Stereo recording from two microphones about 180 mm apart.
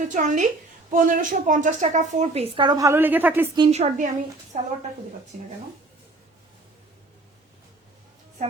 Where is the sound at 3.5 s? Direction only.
35° right (ahead or behind).